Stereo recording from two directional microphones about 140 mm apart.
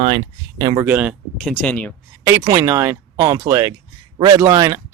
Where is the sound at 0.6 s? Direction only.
30° right (ahead or behind).